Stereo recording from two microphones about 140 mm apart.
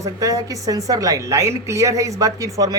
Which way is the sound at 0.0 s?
25° right (ahead or behind).